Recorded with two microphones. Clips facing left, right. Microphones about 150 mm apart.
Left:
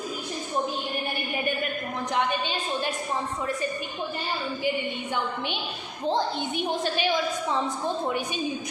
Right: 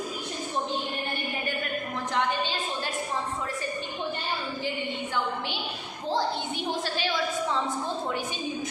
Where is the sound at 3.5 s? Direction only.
20° left (ahead or behind).